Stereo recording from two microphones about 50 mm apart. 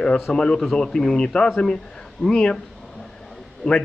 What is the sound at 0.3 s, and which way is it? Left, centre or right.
Speech, centre.